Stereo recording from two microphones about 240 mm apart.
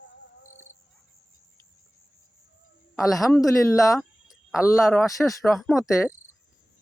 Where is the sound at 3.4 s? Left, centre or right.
Centre.